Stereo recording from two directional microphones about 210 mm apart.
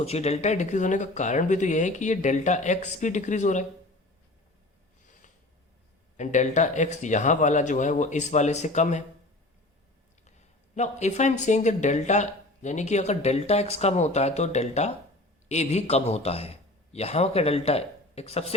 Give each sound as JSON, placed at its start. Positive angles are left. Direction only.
{"t": 0.0, "sound": "speech", "side_deg": 30}
{"t": 6.1, "sound": "speech", "side_deg": 35}
{"t": 10.2, "sound": "a man's voice", "side_deg": 35}